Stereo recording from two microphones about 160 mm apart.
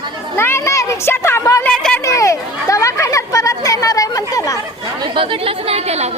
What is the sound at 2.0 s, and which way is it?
Chatter, 20° left (ahead or behind).